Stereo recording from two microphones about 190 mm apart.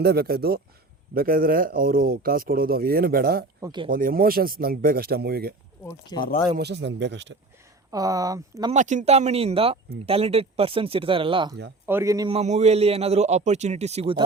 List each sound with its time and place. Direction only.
0.0 s speech: 55° right (ahead or behind)
3.6 s speech: 20° right (ahead or behind)
3.8 s speech: 50° right (ahead or behind)
5.8 s speech: 20° left (ahead or behind)
6.6 s speech: 65° right (ahead or behind)
7.9 s speech: 20° right (ahead or behind)
8.7 s a man's voice: 40° right (ahead or behind)
11.9 s a man's voice: 15° right (ahead or behind)
12.3 s a man's voice: 35° right (ahead or behind)